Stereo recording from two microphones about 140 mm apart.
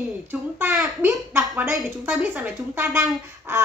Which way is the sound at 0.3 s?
15° right (ahead or behind).